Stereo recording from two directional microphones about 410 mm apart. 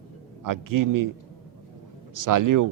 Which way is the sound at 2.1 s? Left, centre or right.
Right.